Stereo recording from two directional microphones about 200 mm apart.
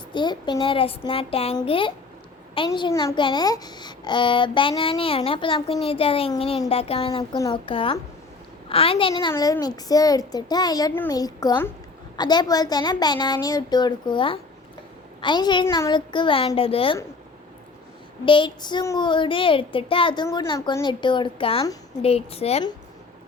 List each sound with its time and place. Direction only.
0.1 s a woman's voice: 25° left (ahead or behind)
18.3 s a woman's voice: 25° left (ahead or behind)